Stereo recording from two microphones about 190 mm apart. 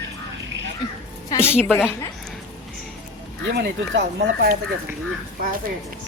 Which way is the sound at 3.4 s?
60° right (ahead or behind).